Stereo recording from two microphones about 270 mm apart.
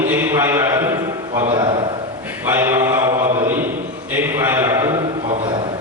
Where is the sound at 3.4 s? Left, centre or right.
Centre.